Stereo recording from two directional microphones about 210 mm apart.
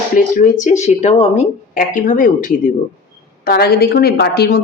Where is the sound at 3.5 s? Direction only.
50° left (ahead or behind).